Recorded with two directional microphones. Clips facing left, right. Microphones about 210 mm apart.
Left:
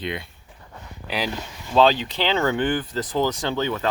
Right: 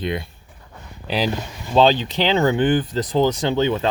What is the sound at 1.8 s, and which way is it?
Speech, 25° right (ahead or behind).